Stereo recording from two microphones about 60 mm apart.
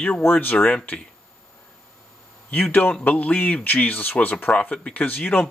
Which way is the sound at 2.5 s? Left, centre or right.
Left.